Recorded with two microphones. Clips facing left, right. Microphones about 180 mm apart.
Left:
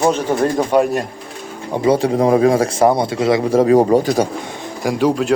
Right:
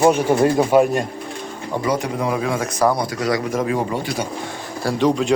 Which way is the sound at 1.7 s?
25° left (ahead or behind).